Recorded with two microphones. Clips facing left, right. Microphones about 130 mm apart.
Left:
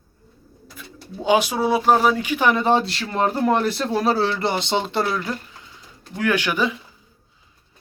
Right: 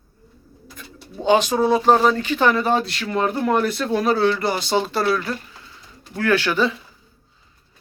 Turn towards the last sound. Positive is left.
turn(degrees=15)  # may be behind; listen again after turning